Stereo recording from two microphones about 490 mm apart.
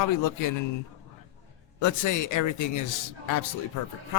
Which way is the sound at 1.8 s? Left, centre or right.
Left.